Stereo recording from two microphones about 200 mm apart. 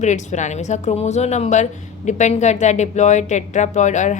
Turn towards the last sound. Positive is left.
turn(degrees=35)  # may be behind; listen again after turning